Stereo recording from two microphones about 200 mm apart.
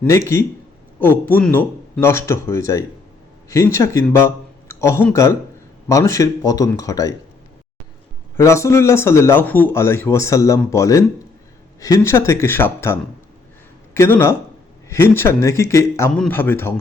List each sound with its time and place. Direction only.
0.0 s a man's voice: 15° left (ahead or behind)
8.4 s a man's voice: 15° left (ahead or behind)